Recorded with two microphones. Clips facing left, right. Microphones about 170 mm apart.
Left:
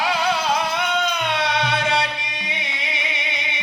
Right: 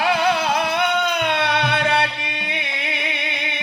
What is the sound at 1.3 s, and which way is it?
Music, 60° right (ahead or behind).